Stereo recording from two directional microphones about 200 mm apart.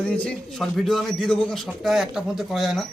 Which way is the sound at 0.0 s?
5° left (ahead or behind).